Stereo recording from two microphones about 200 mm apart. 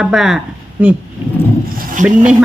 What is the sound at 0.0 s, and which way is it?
Speech, centre (ahead or behind).